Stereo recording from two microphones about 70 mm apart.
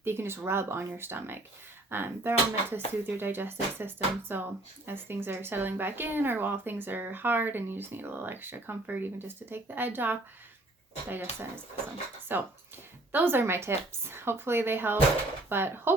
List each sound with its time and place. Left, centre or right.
0.0 s speech: right